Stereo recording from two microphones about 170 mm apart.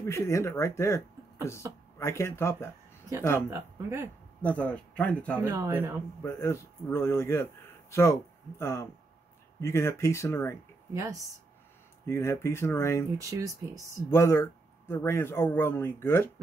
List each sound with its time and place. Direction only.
0.0 s speech: 15° left (ahead or behind)
3.4 s speech: 15° right (ahead or behind)
4.4 s speech: 10° left (ahead or behind)
5.4 s speech: 15° right (ahead or behind)
6.2 s speech: 15° left (ahead or behind)
10.9 s speech: 20° right (ahead or behind)
12.1 s speech: 15° left (ahead or behind)
13.2 s speech: 20° right (ahead or behind)
14.1 s speech: 15° left (ahead or behind)